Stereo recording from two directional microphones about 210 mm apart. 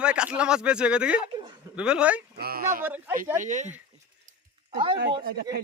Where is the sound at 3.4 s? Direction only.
35° right (ahead or behind).